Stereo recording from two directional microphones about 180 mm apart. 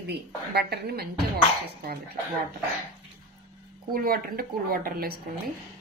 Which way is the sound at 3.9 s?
55° right (ahead or behind).